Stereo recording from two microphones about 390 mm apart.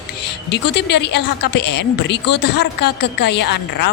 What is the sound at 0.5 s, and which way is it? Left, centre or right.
A woman's voice, left.